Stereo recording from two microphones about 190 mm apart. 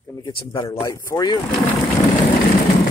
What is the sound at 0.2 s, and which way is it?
Speech, 25° left (ahead or behind).